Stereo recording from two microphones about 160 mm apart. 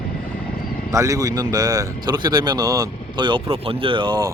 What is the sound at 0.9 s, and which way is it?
Speech, 20° right (ahead or behind).